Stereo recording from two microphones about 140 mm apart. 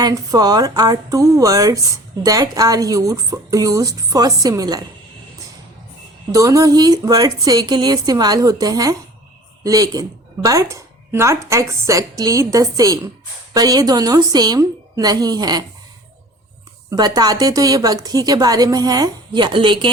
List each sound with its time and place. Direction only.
0.0 s speech: 25° right (ahead or behind)
6.3 s speech: 25° right (ahead or behind)
16.9 s speech: 30° right (ahead or behind)